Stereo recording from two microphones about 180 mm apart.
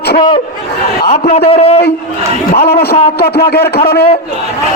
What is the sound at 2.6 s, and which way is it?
Speech, 60° left (ahead or behind).